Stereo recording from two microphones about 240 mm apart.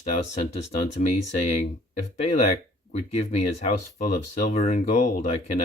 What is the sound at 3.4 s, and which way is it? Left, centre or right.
Speech, left.